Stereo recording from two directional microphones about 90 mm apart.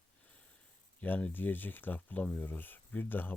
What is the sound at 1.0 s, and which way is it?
Speech, 15° left (ahead or behind).